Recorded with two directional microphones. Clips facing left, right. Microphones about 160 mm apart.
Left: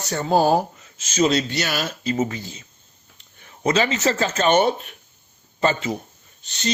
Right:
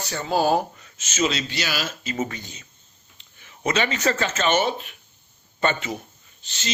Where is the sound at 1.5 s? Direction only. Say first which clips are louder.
Left 4 dB; 55° left (ahead or behind).